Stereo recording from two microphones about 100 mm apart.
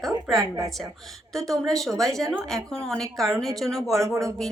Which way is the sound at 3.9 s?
30° right (ahead or behind).